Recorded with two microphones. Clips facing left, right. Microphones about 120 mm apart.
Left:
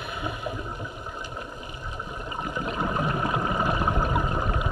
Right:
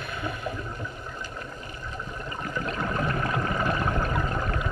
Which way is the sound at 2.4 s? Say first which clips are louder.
Left 1 dB; 15° left (ahead or behind).